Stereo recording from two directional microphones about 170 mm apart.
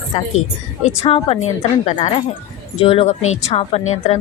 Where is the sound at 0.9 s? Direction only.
35° left (ahead or behind).